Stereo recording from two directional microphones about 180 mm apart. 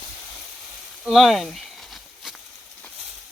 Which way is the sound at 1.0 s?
Centre (ahead or behind).